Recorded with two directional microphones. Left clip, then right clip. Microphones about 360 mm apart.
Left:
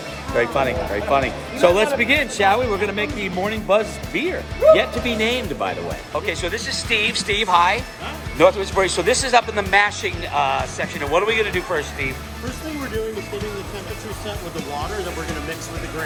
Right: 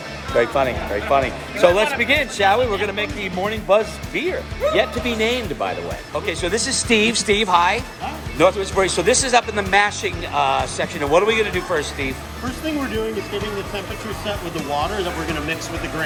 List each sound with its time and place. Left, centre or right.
0.3 s speech: centre
6.1 s speech: centre
6.9 s speech: right
7.3 s speech: centre